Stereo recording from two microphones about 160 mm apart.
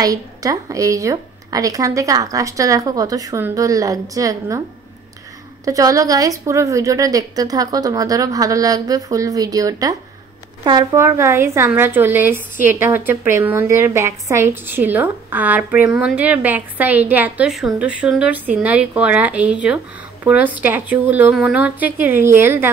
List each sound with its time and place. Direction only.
0.0 s speech: 20° right (ahead or behind)
5.7 s speech: 20° right (ahead or behind)